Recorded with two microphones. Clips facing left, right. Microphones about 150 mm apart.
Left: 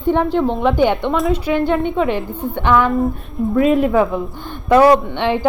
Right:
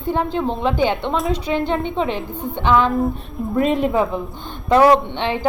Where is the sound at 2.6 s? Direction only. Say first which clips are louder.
Left 1 dB; 15° right (ahead or behind).